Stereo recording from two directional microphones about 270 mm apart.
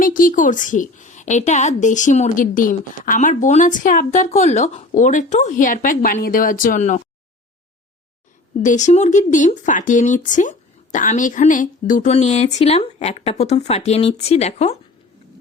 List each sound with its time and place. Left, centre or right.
0.0 s a woman's voice: left
8.6 s a woman's voice: left